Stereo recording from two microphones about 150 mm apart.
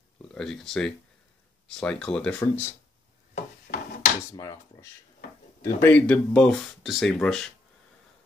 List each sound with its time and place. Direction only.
0.3 s speech: 5° left (ahead or behind)
3.3 s wood: 70° left (ahead or behind)
4.4 s speech: 20° left (ahead or behind); by 7.5 s 5° left (ahead or behind)